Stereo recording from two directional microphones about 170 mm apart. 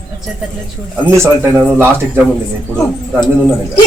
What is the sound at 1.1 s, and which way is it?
Speech, 15° right (ahead or behind).